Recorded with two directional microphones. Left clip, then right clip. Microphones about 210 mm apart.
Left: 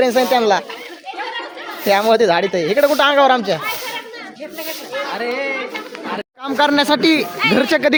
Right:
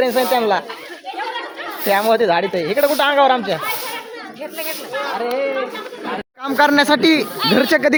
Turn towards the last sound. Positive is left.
turn(degrees=0)  # may be behind; listen again after turning